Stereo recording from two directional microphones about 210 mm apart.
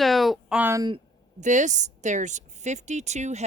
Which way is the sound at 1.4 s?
35° right (ahead or behind).